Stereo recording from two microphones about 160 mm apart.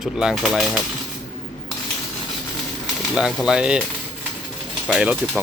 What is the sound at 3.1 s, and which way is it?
Speech, 5° right (ahead or behind).